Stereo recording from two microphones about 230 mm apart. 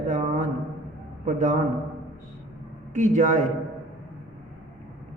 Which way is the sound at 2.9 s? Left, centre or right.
Right.